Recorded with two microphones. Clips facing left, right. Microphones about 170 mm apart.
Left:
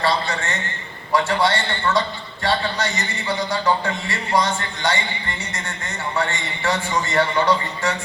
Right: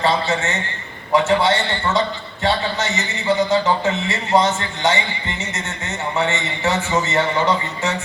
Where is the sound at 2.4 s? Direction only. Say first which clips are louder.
Right 2 dB; 20° right (ahead or behind).